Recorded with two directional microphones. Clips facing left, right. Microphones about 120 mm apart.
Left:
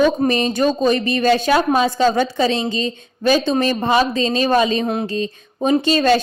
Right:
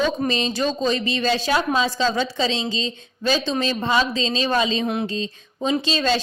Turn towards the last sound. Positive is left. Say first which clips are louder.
# left 7 dB
turn(degrees=55)  # may be behind; listen again after turning